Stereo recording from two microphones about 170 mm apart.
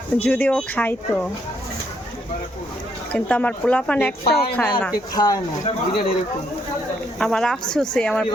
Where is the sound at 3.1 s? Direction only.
5° left (ahead or behind).